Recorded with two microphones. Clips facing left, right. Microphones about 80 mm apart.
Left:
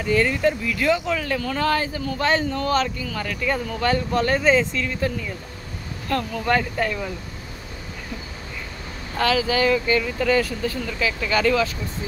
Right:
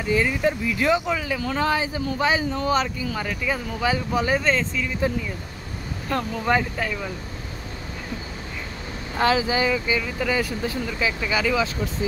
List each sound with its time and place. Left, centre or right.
0.0 s speech: centre
4.4 s speech: centre
6.0 s speech: centre
6.8 s speech: centre
9.2 s speech: right
9.7 s speech: centre